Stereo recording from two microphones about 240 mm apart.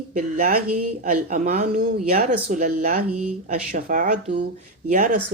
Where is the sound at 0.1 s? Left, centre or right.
Right.